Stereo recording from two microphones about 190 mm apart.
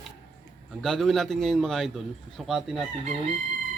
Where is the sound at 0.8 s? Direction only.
Centre (ahead or behind).